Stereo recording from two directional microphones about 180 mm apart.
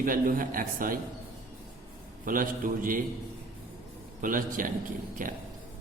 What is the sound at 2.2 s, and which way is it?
Speech, 50° right (ahead or behind).